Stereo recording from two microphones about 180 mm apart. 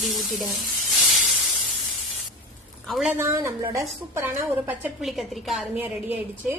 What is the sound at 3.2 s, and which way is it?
A woman's voice, 15° right (ahead or behind).